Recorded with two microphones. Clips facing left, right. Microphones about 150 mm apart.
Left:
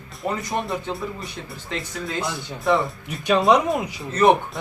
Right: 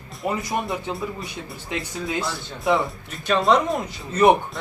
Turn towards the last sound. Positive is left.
turn(degrees=-10)  # may be behind; listen again after turning